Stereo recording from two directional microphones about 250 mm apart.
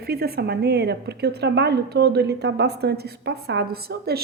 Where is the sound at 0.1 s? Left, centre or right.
Right.